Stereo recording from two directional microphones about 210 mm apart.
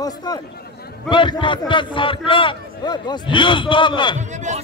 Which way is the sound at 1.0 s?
25° left (ahead or behind).